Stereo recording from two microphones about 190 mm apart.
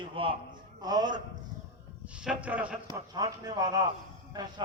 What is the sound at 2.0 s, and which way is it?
Speech, 5° right (ahead or behind).